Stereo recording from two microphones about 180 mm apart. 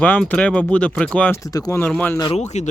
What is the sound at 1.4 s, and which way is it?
Speech, 20° left (ahead or behind).